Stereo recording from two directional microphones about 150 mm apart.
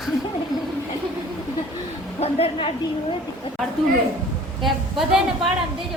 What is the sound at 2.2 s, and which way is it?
A woman's voice, 40° left (ahead or behind).